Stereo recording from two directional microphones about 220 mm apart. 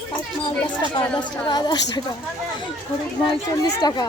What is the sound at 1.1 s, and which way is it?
Speech, 20° left (ahead or behind).